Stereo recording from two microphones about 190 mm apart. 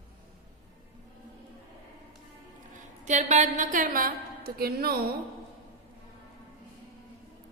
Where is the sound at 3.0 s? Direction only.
40° right (ahead or behind).